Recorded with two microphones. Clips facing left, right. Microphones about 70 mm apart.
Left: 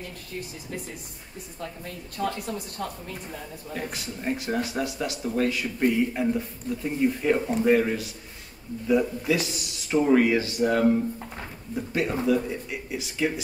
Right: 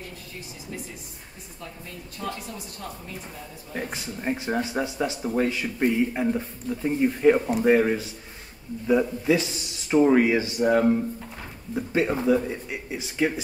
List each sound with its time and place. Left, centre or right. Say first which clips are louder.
2.2 s a woman's voice: left 4 dB; left
3.7 s a man's voice: right 2 dB; right
5.2 s a man's voice: left 1 dB; centre
7.8 s a man's voice: right 3 dB; centre
12.4 s speech: right 1 dB; centre